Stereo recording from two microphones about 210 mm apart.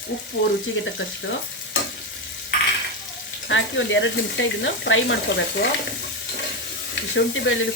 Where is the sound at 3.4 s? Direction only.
65° left (ahead or behind).